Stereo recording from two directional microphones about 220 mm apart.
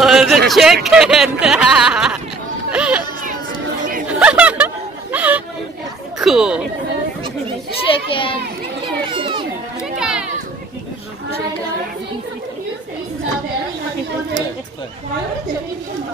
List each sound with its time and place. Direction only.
0.0 s a sound: centre (ahead or behind)
0.5 s speech: centre (ahead or behind)
2.7 s baby cry: 5° right (ahead or behind)
4.1 s chatter: 5° right (ahead or behind)
6.1 s speech: centre (ahead or behind)
7.9 s a child's voice: 25° left (ahead or behind)
9.1 s children playing: 25° right (ahead or behind)
9.9 s a sound: 5° right (ahead or behind)